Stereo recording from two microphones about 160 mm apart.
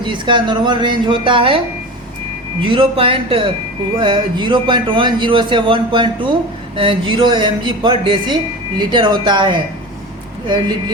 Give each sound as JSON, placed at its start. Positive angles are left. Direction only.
{"t": 0.0, "sound": "speech", "side_deg": -30}